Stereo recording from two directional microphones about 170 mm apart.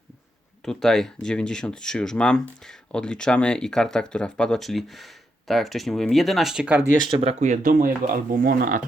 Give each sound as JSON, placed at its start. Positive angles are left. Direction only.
{"t": 0.6, "sound": "speech", "side_deg": 5}
{"t": 6.9, "sound": "speech", "side_deg": -25}